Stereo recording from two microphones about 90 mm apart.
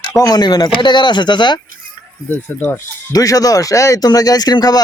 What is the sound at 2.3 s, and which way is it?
Speech, 20° left (ahead or behind).